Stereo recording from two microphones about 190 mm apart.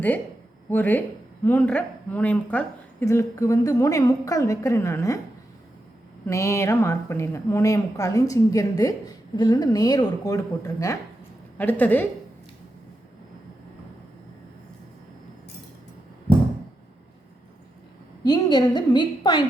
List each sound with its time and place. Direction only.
0.7 s a woman's voice: 10° left (ahead or behind)
6.2 s a woman's voice: 15° left (ahead or behind)
18.2 s speech: 20° left (ahead or behind)